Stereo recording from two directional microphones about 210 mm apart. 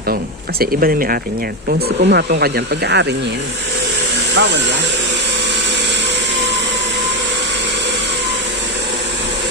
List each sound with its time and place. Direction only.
0.1 s speech: 45° right (ahead or behind)
4.3 s speech: 60° right (ahead or behind)